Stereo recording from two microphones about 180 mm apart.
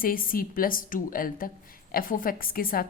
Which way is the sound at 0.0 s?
50° left (ahead or behind).